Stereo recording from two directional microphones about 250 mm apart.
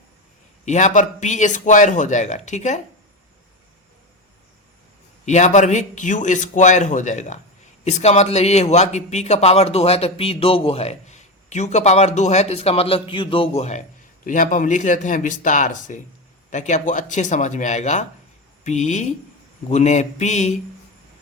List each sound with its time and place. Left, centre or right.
0.6 s a man's voice: left
5.2 s a man's voice: left